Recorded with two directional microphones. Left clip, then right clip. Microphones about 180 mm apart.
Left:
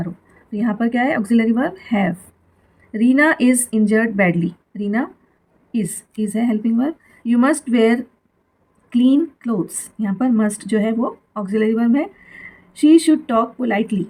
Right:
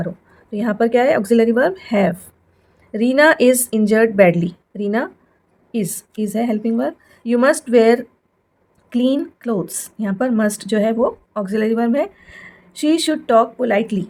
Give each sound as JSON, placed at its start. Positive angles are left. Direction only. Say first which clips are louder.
{"t": 0.5, "sound": "a woman's voice", "louder": "right 5 dB", "side_deg": -45}